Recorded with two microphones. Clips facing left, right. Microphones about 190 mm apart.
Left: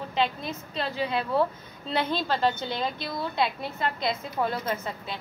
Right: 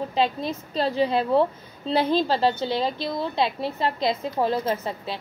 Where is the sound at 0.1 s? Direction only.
35° right (ahead or behind).